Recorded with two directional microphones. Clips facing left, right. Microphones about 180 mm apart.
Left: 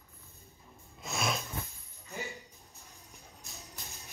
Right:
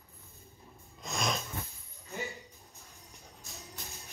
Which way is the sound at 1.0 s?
5° left (ahead or behind).